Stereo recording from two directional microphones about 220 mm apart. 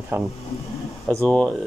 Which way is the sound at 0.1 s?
10° right (ahead or behind).